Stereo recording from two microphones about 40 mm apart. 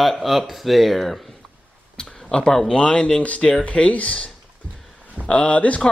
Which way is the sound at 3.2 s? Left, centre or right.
Left.